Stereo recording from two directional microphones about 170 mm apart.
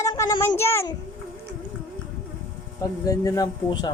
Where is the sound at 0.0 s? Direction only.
20° left (ahead or behind).